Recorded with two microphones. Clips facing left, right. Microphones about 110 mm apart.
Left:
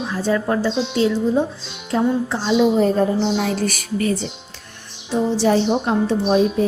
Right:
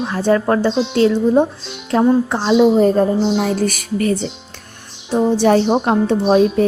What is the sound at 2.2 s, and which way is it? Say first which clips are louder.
Speech: right 4 dB; 55° right (ahead or behind).